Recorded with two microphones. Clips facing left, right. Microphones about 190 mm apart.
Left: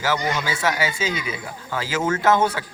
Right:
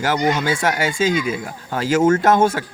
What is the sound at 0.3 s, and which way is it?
Speech, 50° right (ahead or behind).